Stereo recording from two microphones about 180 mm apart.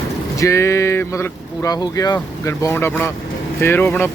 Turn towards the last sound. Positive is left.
turn(degrees=10)  # may be behind; listen again after turning